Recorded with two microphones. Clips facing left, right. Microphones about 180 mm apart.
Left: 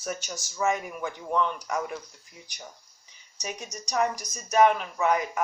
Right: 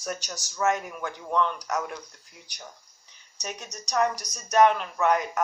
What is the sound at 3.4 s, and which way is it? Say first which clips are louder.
Speech: left 1 dB; 10° left (ahead or behind).